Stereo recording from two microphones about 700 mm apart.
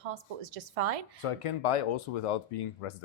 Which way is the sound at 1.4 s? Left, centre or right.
Left.